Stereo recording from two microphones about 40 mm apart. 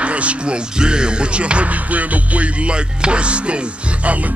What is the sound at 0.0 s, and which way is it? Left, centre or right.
Speech, right.